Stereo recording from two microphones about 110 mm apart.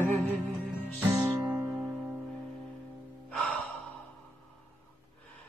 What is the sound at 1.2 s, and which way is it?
Music, 15° right (ahead or behind).